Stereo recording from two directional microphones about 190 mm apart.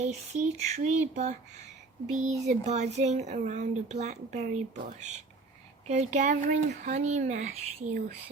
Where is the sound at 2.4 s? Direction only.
35° right (ahead or behind).